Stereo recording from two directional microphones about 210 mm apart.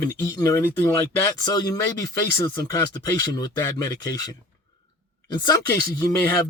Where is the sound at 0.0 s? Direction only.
15° left (ahead or behind).